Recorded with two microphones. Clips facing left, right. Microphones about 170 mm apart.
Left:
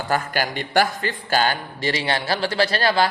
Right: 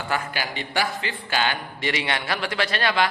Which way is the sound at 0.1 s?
45° left (ahead or behind).